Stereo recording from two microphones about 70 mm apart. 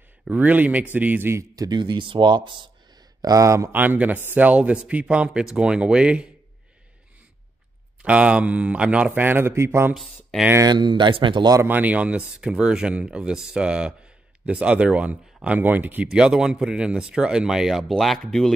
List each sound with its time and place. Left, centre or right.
0.3 s speech: right
1.5 s speech: right
2.9 s a sound: right
3.7 s a man's voice: right
8.0 s a man's voice: centre
9.2 s a man's voice: right
10.6 s speech: right
11.6 s a man's voice: right
16.1 s a man's voice: centre